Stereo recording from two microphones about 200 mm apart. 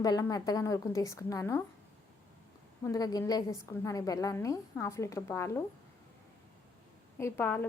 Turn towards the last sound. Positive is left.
turn(degrees=10)  # may be behind; listen again after turning